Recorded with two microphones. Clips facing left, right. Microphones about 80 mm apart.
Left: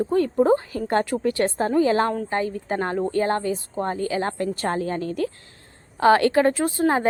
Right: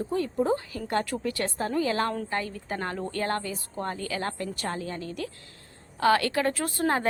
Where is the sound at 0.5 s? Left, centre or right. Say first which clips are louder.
Left 7 dB; left.